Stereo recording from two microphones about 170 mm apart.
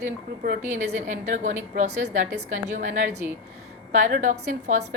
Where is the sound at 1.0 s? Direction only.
50° right (ahead or behind).